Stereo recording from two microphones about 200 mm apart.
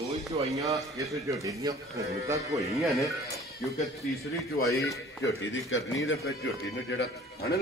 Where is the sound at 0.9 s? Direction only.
15° right (ahead or behind).